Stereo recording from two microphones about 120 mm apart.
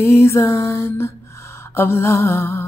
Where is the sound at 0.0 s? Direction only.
25° left (ahead or behind).